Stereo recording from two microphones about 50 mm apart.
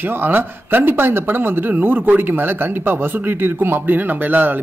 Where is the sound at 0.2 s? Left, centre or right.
Right.